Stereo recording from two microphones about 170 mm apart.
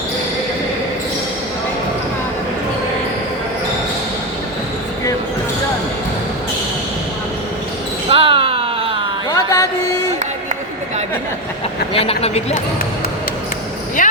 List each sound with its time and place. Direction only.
8.1 s a sound: 30° right (ahead or behind)
9.3 s music: 20° left (ahead or behind)
11.9 s speech: 35° left (ahead or behind)
14.0 s vehicle: 55° left (ahead or behind)